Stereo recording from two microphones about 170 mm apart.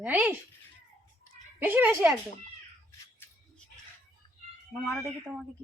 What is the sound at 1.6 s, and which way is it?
Speech, 10° right (ahead or behind).